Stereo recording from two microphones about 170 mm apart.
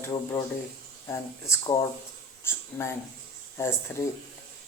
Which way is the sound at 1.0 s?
15° left (ahead or behind).